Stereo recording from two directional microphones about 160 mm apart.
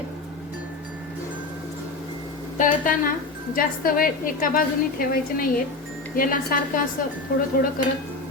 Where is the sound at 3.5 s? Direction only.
60° left (ahead or behind).